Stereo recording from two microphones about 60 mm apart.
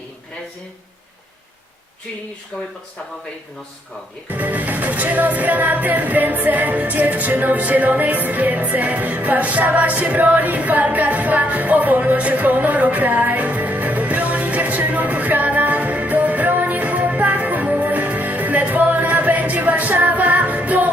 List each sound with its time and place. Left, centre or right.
4.3 s music: right